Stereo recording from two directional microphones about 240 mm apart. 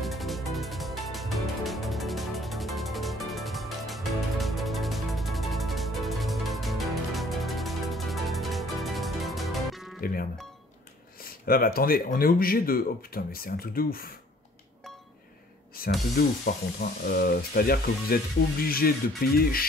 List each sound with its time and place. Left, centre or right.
0.0 s music: centre
9.9 s music: left
11.1 s speech: left
15.8 s spray: left
16.2 s speech: left